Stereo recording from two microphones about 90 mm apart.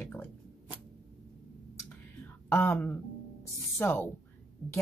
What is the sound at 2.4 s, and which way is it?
Speech, 25° left (ahead or behind).